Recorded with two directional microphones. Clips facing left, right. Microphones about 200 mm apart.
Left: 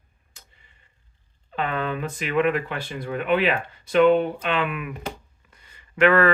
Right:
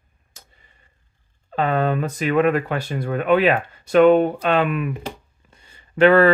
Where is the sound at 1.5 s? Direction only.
40° right (ahead or behind).